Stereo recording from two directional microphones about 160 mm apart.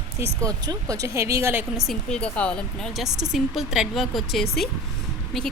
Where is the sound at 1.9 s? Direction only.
5° left (ahead or behind).